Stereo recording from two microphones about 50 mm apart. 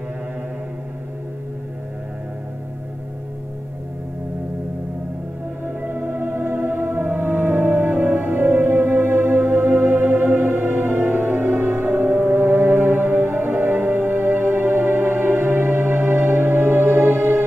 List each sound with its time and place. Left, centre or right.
5.8 s music: right